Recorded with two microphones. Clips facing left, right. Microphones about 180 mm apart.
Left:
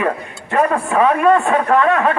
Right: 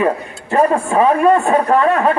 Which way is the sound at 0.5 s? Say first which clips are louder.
Right 2 dB; 30° right (ahead or behind).